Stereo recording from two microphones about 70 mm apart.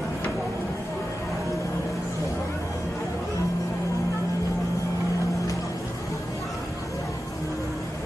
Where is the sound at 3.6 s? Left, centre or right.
Left.